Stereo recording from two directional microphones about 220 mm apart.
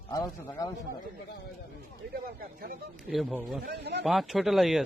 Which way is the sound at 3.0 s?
Centre (ahead or behind).